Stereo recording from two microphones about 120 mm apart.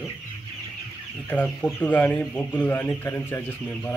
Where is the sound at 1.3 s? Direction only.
10° left (ahead or behind).